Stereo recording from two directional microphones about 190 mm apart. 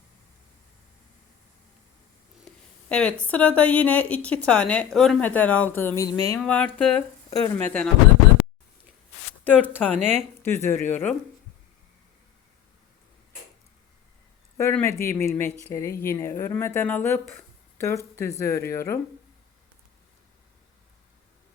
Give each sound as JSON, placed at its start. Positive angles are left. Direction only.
{"t": 2.9, "sound": "speech", "side_deg": 5}
{"t": 6.4, "sound": "speech", "side_deg": 5}
{"t": 9.4, "sound": "speech", "side_deg": 10}
{"t": 9.9, "sound": "speech", "side_deg": -35}
{"t": 10.4, "sound": "speech", "side_deg": 15}
{"t": 14.6, "sound": "speech", "side_deg": 10}